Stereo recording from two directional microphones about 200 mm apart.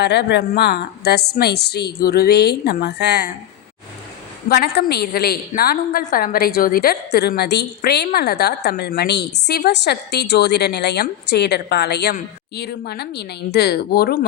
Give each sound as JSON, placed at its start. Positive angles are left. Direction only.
{"t": 0.0, "sound": "a woman's voice", "side_deg": 55}
{"t": 4.4, "sound": "a woman's voice", "side_deg": 50}